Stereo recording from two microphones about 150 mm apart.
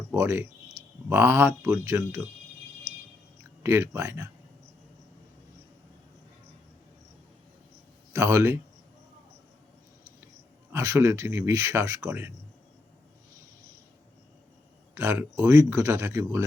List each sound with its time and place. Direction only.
0.1 s speech: 15° right (ahead or behind)
3.6 s speech: 20° right (ahead or behind)
8.1 s speech: 20° right (ahead or behind)
10.7 s speech: 20° right (ahead or behind)
14.9 s speech: 15° right (ahead or behind)